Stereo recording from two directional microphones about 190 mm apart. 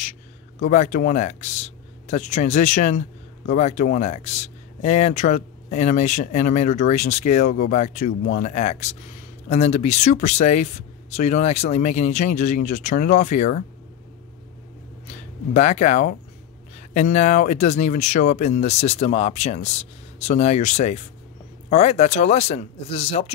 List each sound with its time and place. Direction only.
0.6 s speech: 40° left (ahead or behind)
15.5 s speech: 35° left (ahead or behind)